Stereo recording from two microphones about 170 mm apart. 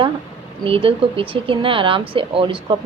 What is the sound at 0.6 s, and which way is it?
Speech, 35° right (ahead or behind).